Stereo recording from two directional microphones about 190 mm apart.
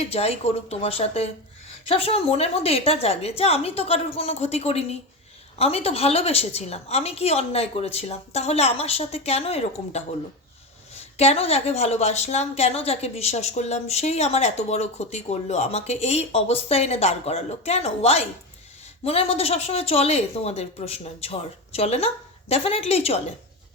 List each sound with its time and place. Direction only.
0.0 s a woman's voice: 30° left (ahead or behind)